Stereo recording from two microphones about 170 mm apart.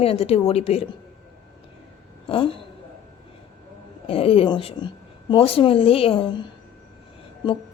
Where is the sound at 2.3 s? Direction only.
30° left (ahead or behind).